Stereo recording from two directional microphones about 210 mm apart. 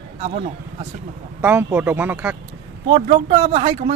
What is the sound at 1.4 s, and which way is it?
Speech, 10° right (ahead or behind).